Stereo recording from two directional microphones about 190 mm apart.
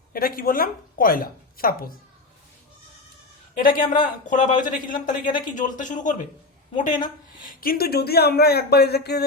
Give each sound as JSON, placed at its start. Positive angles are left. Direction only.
{"t": 0.1, "sound": "a woman's voice", "side_deg": 50}
{"t": 3.6, "sound": "a man's voice", "side_deg": 45}